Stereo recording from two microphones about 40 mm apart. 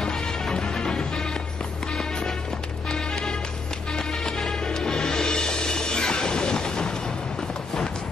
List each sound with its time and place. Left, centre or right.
0.0 s music: centre
2.9 s music: centre
4.4 s music: centre